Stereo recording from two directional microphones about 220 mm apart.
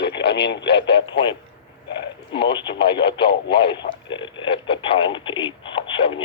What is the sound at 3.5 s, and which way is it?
Speech, 20° left (ahead or behind).